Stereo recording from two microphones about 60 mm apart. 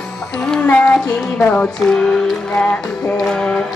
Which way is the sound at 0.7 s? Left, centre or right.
Left.